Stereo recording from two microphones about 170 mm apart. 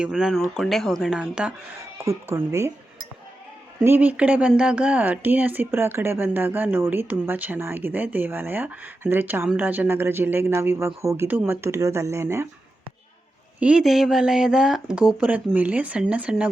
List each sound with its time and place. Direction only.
0.0 s speech: 5° right (ahead or behind)
3.8 s speech: 10° right (ahead or behind)
13.6 s speech: 5° right (ahead or behind)